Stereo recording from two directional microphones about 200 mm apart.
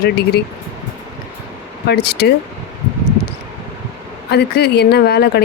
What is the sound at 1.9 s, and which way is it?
Speech, 55° left (ahead or behind).